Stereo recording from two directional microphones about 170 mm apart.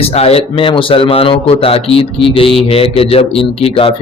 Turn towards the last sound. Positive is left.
turn(degrees=35)  # may be behind; listen again after turning